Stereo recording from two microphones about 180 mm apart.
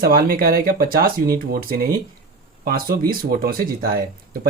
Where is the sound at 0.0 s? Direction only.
55° right (ahead or behind).